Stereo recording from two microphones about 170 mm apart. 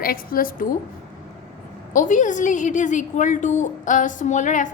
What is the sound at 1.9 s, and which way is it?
A woman's voice, 50° left (ahead or behind).